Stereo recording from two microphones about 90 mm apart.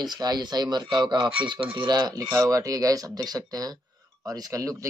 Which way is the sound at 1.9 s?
45° right (ahead or behind).